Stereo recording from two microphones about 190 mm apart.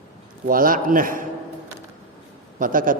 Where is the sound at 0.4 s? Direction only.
45° right (ahead or behind).